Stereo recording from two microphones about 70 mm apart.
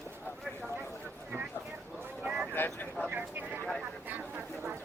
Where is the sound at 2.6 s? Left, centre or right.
Left.